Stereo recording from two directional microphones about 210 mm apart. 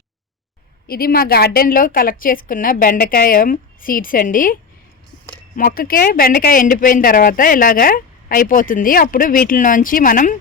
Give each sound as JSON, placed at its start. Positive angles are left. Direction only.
{"t": 0.9, "sound": "a woman's voice", "side_deg": 45}
{"t": 5.5, "sound": "speech", "side_deg": 40}